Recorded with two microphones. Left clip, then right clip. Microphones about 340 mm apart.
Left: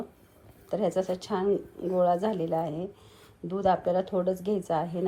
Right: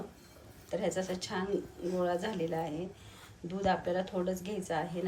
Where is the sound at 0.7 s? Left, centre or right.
Centre.